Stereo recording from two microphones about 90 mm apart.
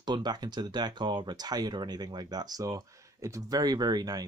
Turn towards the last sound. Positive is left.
turn(degrees=-45)  # may be behind; listen again after turning